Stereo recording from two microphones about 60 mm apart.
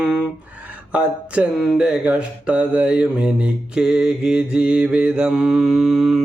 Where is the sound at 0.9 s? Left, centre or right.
Centre.